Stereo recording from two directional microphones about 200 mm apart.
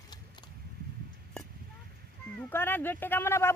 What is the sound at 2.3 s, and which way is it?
Speech, 10° left (ahead or behind).